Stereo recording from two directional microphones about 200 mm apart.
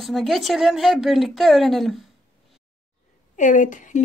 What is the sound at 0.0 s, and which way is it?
Speech, centre (ahead or behind).